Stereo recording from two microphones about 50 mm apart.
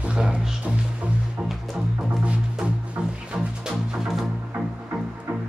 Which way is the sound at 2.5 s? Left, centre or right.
Right.